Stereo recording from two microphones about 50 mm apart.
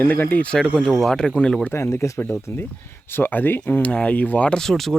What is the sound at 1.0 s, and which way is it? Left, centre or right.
Speech, centre.